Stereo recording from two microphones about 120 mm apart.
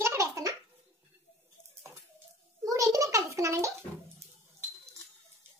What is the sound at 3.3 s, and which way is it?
Bathtub, 25° right (ahead or behind).